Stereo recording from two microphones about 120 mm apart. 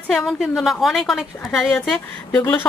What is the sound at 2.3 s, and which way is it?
Speech, 15° left (ahead or behind).